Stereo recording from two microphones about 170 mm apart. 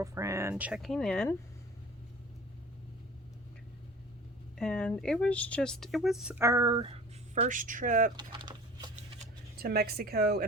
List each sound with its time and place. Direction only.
0.0 s speech: 15° right (ahead or behind)
0.5 s speech: 5° right (ahead or behind)
4.5 s speech: 5° left (ahead or behind)
6.4 s speech: 20° right (ahead or behind)
7.3 s speech: 50° right (ahead or behind)
8.1 s a sound: 25° right (ahead or behind)
9.6 s a woman's voice: 65° right (ahead or behind)